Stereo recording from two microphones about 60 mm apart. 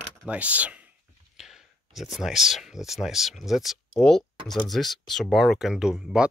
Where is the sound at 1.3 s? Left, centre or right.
Centre.